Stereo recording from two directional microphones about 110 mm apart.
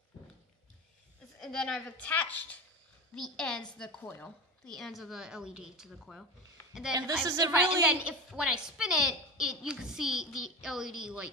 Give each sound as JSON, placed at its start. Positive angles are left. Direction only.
{"t": 1.4, "sound": "a woman's voice", "side_deg": 5}
{"t": 4.0, "sound": "speech", "side_deg": 20}
{"t": 4.6, "sound": "a woman's voice", "side_deg": 5}
{"t": 6.9, "sound": "a woman's voice", "side_deg": -40}
{"t": 7.5, "sound": "a woman's voice", "side_deg": -10}